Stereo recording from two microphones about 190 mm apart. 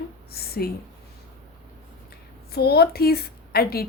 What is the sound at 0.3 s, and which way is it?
Speech, 55° left (ahead or behind).